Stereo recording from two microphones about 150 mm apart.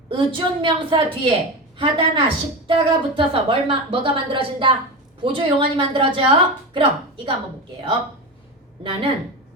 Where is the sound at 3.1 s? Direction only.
35° right (ahead or behind).